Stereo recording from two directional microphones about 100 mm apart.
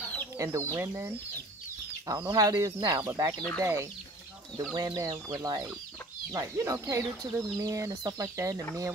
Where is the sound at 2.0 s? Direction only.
40° right (ahead or behind).